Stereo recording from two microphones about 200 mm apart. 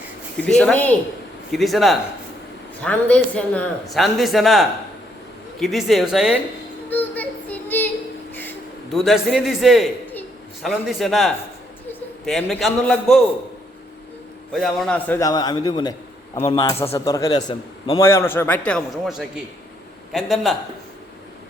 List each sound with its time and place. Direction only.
0.3 s a man's voice: 5° left (ahead or behind)
6.9 s child singing: 10° left (ahead or behind)
8.3 s a sound: 10° left (ahead or behind)
8.9 s a man's voice: centre (ahead or behind)
14.5 s a man's voice: centre (ahead or behind); by 18.0 s 25° left (ahead or behind)
18.0 s a man's voice: 15° left (ahead or behind)